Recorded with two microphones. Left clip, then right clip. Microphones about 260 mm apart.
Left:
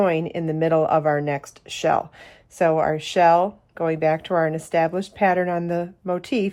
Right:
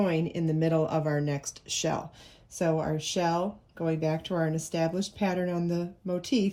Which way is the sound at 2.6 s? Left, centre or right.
Left.